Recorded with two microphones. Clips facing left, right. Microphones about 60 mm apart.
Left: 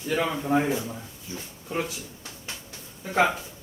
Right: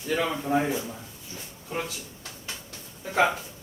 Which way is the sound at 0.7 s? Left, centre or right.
Left.